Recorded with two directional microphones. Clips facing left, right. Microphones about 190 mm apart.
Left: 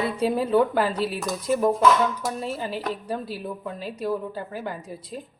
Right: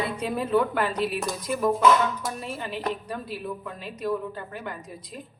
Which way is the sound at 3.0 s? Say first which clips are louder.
Left 3 dB; 30° left (ahead or behind).